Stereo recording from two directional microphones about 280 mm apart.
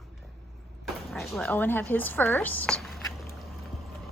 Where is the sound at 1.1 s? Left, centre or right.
Centre.